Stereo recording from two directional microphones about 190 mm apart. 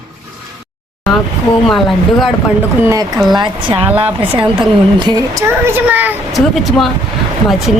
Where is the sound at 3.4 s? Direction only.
25° right (ahead or behind).